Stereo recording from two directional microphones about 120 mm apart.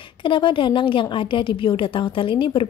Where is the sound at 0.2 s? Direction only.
45° left (ahead or behind).